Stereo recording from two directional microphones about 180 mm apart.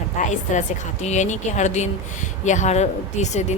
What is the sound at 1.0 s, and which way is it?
A woman's voice, 40° left (ahead or behind).